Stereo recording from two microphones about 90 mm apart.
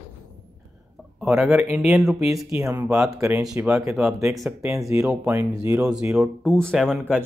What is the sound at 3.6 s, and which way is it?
Speech, 25° right (ahead or behind).